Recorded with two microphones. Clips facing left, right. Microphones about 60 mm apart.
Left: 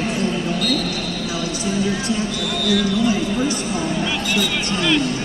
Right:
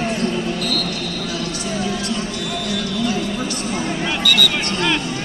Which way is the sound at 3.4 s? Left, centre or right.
Right.